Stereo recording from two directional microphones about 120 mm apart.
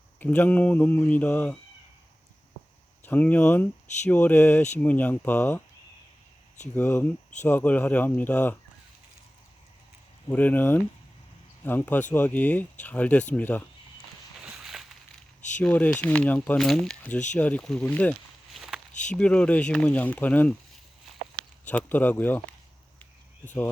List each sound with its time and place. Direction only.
0.2 s speech: 15° left (ahead or behind)
3.0 s speech: 15° left (ahead or behind)
6.7 s speech: 15° left (ahead or behind)
10.2 s speech: 15° left (ahead or behind)
14.4 s a sound: 5° right (ahead or behind)
15.5 s speech: 10° left (ahead or behind)
18.5 s walk: 5° right (ahead or behind)
19.1 s speech: 10° left (ahead or behind)
21.7 s speech: 15° left (ahead or behind)